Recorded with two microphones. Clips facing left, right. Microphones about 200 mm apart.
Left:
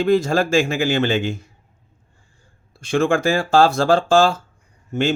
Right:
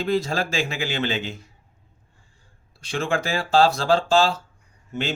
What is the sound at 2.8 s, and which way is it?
Speech, 50° left (ahead or behind).